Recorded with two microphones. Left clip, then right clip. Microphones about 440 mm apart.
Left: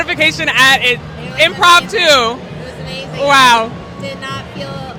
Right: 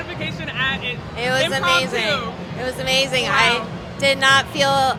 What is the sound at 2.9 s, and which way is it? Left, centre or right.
Music, right.